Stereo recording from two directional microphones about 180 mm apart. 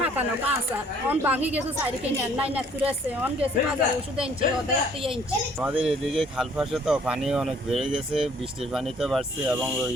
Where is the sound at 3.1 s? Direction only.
10° right (ahead or behind).